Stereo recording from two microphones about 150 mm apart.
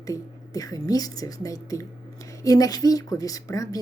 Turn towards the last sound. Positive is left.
turn(degrees=20)  # may be behind; listen again after turning